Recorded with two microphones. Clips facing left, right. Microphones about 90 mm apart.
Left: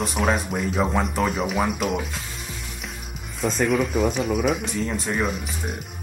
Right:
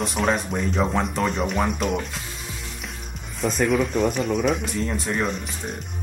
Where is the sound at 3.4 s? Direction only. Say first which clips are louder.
Even; centre (ahead or behind).